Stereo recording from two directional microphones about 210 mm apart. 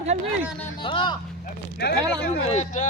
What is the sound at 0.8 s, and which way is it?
Speech, 25° left (ahead or behind).